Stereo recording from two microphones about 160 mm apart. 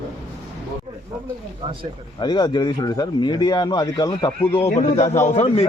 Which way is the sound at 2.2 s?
25° left (ahead or behind).